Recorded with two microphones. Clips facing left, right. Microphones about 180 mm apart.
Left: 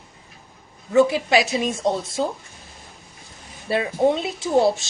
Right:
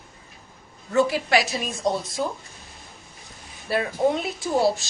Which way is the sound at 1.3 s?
20° left (ahead or behind).